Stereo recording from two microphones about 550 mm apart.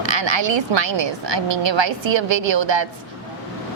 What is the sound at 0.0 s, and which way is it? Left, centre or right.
A woman's voice, right.